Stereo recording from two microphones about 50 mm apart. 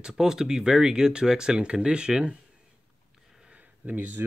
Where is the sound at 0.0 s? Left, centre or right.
Centre.